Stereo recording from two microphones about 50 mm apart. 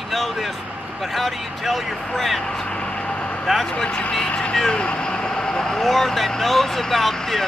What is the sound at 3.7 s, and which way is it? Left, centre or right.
Speech, centre.